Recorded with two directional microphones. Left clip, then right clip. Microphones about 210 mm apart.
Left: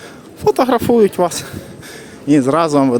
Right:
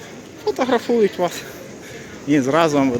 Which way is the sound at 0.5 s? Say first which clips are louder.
Left 4 dB; 40° left (ahead or behind).